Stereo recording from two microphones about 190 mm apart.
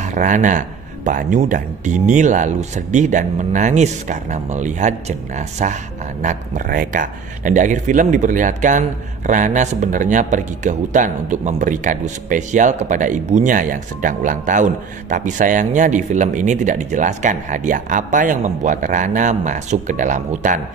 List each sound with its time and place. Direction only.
0.0 s speech: 40° right (ahead or behind)